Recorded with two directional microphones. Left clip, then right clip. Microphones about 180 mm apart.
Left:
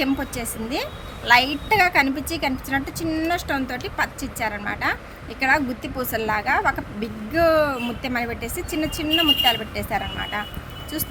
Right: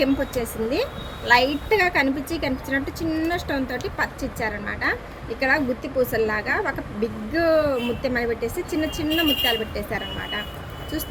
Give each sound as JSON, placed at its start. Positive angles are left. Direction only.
{"t": 0.0, "sound": "speech", "side_deg": 60}